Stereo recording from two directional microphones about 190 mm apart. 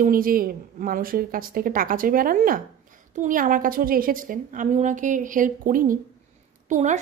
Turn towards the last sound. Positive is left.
turn(degrees=-40)  # may be behind; listen again after turning